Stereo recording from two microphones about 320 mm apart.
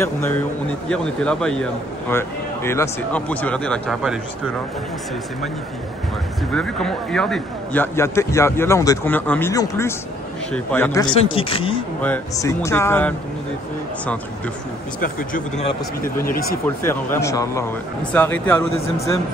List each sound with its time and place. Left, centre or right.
0.8 s a man's voice: centre
6.5 s a man's voice: centre
15.0 s speech: left
16.6 s a man's voice: centre